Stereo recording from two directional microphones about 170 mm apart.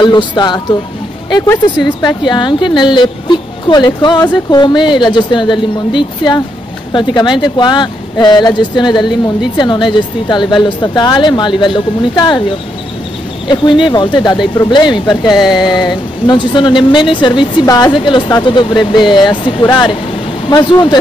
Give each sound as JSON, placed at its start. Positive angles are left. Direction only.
{"t": 0.0, "sound": "speech", "side_deg": 25}
{"t": 2.0, "sound": "speech", "side_deg": 25}
{"t": 13.5, "sound": "speech", "side_deg": 25}
{"t": 15.3, "sound": "a sound", "side_deg": 0}
{"t": 15.9, "sound": "speech", "side_deg": 25}